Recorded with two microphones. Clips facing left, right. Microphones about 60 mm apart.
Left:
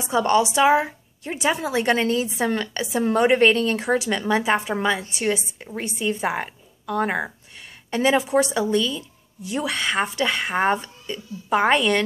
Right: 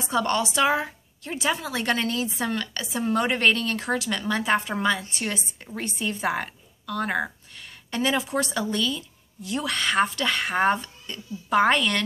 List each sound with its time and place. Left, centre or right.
0.0 s a woman's voice: centre